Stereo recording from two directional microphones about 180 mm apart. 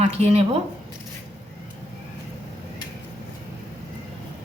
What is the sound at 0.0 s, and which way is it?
Speech, 35° right (ahead or behind).